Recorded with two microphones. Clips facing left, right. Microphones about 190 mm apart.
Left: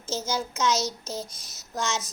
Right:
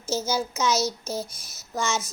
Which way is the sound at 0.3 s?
5° right (ahead or behind).